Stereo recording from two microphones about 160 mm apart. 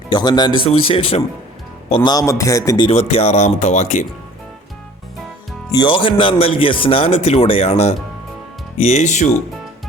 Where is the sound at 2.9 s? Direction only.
40° left (ahead or behind).